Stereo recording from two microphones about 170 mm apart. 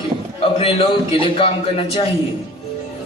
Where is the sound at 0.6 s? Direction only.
35° left (ahead or behind).